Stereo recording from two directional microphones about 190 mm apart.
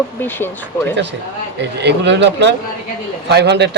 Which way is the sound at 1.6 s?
65° right (ahead or behind).